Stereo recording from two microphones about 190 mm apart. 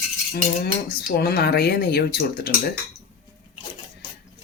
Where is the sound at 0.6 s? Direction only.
55° left (ahead or behind).